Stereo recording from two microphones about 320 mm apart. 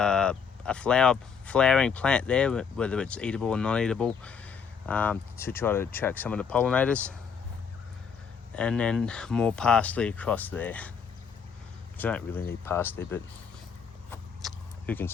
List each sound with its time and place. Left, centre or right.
0.0 s speech: centre
8.5 s speech: centre
11.9 s speech: centre
14.1 s vehicle: centre